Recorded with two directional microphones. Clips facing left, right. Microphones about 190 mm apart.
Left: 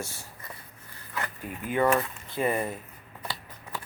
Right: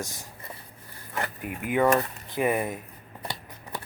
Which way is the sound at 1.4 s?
15° right (ahead or behind).